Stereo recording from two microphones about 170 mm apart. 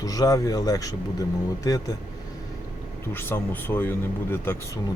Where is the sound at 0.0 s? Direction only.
20° left (ahead or behind).